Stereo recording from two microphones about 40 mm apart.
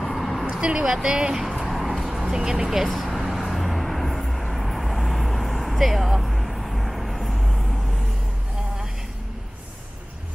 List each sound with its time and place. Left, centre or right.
0.0 s vehicle: centre
0.5 s vehicle: right
0.8 s speech: centre
1.3 s a sound: centre
2.2 s speech: centre
2.8 s vehicle: centre